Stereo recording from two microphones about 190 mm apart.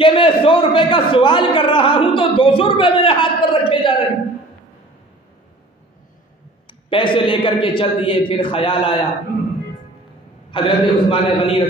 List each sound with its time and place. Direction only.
0.0 s a man's voice: 25° left (ahead or behind)
6.7 s a man's voice: 25° left (ahead or behind)
10.5 s a man's voice: 25° left (ahead or behind)